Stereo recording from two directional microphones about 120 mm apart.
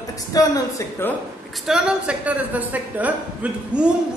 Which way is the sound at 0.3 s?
30° left (ahead or behind).